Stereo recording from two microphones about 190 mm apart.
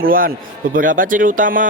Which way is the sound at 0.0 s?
50° right (ahead or behind).